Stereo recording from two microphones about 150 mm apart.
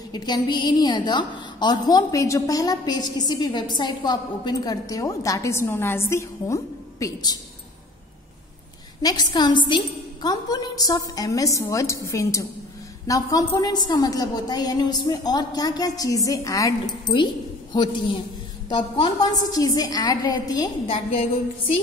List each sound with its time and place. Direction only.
0.1 s a woman's voice: 30° left (ahead or behind)
9.0 s a woman's voice: 25° left (ahead or behind)
20.8 s a woman's voice: 40° left (ahead or behind)